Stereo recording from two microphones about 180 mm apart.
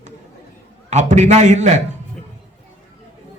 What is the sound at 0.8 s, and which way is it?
Speech, 40° right (ahead or behind).